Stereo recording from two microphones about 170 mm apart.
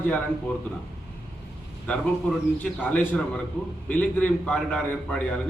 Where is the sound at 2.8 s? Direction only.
10° left (ahead or behind).